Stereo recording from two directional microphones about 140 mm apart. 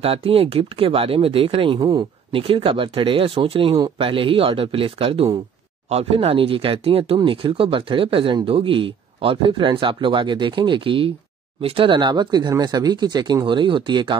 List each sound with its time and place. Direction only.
0.0 s speech: 45° right (ahead or behind)
1.8 s speech: 25° right (ahead or behind)
2.3 s speech: 40° right (ahead or behind)